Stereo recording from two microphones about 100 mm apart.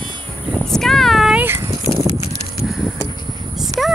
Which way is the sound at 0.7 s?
5° left (ahead or behind).